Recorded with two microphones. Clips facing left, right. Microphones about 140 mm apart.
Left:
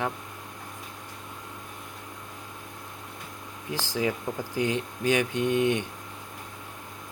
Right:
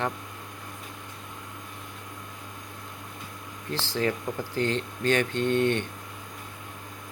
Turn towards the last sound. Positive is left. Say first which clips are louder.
# even
turn(degrees=10)  # may be behind; listen again after turning